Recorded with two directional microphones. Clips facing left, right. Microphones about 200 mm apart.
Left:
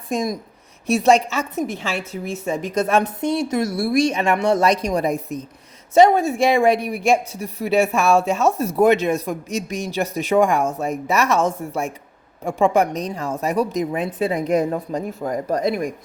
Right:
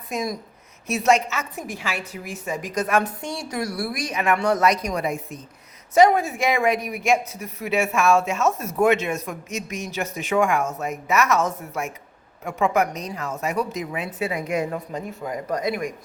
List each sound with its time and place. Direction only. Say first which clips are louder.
0.9 s a woman's voice: left 4 dB; 30° left (ahead or behind)
5.9 s speech: left 3 dB; 25° left (ahead or behind)